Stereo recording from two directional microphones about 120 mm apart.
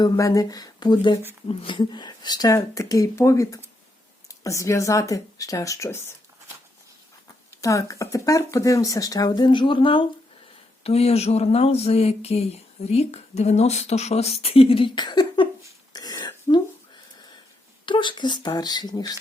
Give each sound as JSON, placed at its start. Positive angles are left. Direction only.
{"t": 0.0, "sound": "speech", "side_deg": 30}
{"t": 7.6, "sound": "speech", "side_deg": 25}
{"t": 10.8, "sound": "speech", "side_deg": 55}
{"t": 15.0, "sound": "a sound", "side_deg": 35}
{"t": 17.8, "sound": "speech", "side_deg": 40}